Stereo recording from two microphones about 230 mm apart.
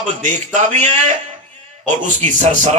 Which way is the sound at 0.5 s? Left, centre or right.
Right.